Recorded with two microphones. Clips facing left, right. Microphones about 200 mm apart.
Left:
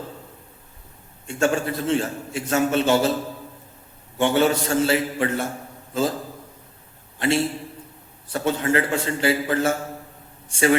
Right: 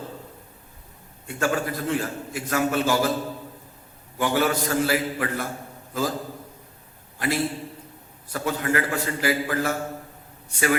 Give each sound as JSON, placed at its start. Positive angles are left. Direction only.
{"t": 1.3, "sound": "a man's voice", "side_deg": 25}
{"t": 4.2, "sound": "a man's voice", "side_deg": 25}
{"t": 7.2, "sound": "a man's voice", "side_deg": 25}